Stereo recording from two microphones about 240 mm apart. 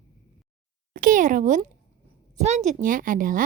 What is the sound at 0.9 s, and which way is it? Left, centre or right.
Speech, right.